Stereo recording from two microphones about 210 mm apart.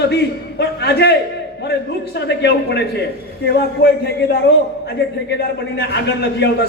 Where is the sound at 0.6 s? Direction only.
50° left (ahead or behind).